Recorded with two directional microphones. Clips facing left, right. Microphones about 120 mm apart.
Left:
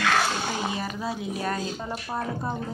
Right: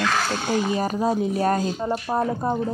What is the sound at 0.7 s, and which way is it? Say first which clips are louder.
Speech: right 8 dB; 40° right (ahead or behind).